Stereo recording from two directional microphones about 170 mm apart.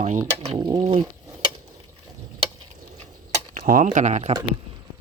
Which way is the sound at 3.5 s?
50° right (ahead or behind).